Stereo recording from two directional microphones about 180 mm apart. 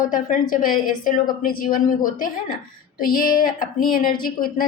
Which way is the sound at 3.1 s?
50° left (ahead or behind).